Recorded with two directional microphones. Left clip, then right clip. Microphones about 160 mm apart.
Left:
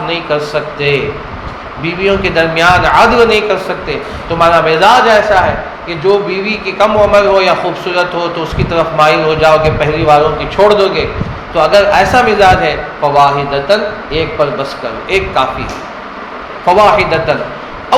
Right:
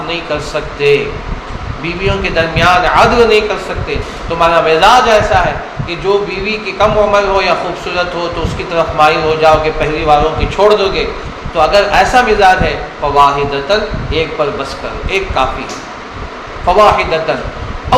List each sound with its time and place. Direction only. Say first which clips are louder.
0.1 s a man's voice: left 3 dB; 40° left (ahead or behind)
16.6 s a man's voice: left 1 dB; 40° left (ahead or behind)